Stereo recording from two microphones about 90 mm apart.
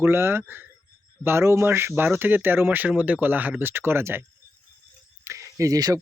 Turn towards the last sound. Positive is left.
turn(degrees=-40)  # may be behind; listen again after turning